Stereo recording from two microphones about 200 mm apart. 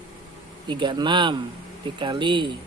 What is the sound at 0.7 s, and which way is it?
Speech, 25° right (ahead or behind).